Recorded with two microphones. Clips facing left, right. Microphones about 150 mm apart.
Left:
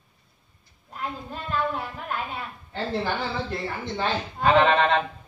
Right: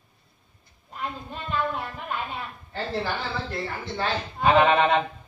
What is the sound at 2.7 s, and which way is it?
A woman's voice, 20° left (ahead or behind).